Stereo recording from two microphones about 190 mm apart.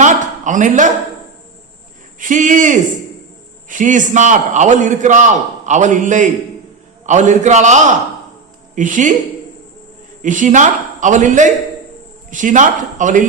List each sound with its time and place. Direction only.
0.0 s a sound: 40° right (ahead or behind)
2.1 s a man's voice: 45° right (ahead or behind)
10.2 s a man's voice: 40° right (ahead or behind)